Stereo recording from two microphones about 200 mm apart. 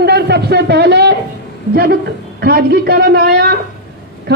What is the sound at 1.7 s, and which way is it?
A woman's voice, 50° right (ahead or behind).